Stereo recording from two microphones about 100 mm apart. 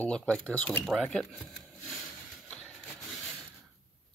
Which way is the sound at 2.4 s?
5° left (ahead or behind).